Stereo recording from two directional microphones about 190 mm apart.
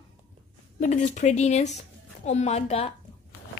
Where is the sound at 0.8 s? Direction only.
40° left (ahead or behind).